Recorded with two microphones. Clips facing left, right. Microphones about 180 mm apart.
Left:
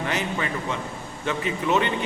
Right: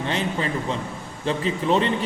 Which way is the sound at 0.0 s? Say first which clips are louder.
Right 2 dB; 30° right (ahead or behind).